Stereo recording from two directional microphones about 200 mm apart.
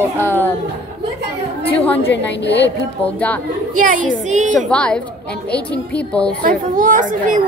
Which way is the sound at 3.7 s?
40° right (ahead or behind).